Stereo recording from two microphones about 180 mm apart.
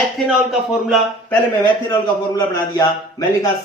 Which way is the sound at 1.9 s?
20° left (ahead or behind).